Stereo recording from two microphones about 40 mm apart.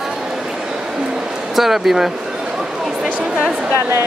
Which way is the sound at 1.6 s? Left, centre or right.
Centre.